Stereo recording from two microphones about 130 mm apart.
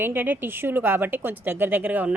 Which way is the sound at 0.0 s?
15° right (ahead or behind).